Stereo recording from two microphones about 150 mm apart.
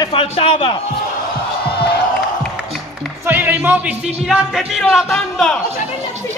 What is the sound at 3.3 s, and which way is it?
A man's voice, 15° right (ahead or behind).